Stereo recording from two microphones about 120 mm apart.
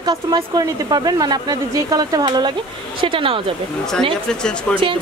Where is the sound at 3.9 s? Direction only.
5° left (ahead or behind).